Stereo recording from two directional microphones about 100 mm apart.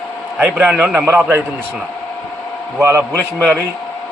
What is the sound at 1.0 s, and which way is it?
Speech, 25° right (ahead or behind).